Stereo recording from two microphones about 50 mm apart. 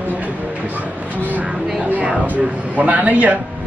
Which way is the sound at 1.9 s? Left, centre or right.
Right.